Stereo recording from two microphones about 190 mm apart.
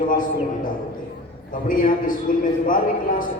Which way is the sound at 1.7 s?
45° left (ahead or behind).